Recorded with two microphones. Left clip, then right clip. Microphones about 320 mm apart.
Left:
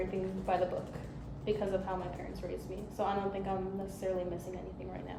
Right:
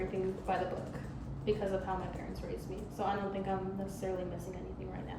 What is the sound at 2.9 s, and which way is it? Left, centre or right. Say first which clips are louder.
A woman's voice: left 2 dB; centre.